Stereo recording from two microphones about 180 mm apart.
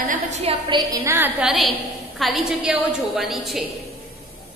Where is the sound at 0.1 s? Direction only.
40° right (ahead or behind); by 3.6 s centre (ahead or behind).